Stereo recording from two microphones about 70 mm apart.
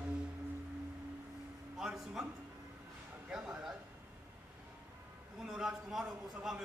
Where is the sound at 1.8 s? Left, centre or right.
Centre.